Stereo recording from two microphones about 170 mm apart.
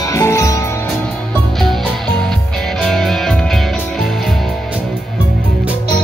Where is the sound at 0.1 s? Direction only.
15° left (ahead or behind).